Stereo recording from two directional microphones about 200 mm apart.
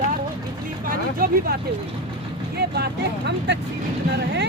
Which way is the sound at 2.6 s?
55° right (ahead or behind).